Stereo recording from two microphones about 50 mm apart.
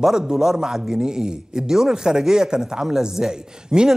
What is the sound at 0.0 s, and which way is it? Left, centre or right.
Speech, centre.